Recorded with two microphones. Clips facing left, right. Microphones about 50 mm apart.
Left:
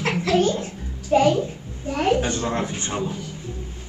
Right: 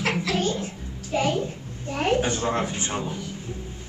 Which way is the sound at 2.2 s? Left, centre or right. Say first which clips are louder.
Even; centre.